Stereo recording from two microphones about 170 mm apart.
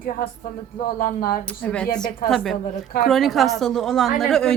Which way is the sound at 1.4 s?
10° left (ahead or behind).